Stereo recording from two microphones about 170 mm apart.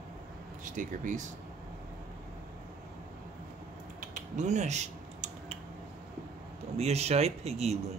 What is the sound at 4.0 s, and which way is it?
Typing, 45° right (ahead or behind).